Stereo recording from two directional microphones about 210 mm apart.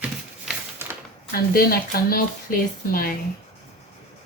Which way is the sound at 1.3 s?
45° left (ahead or behind).